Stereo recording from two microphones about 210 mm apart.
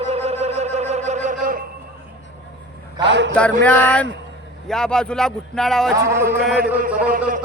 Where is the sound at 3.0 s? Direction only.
55° right (ahead or behind).